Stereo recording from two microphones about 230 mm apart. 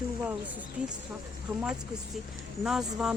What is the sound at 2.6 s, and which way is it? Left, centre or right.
Speech, centre.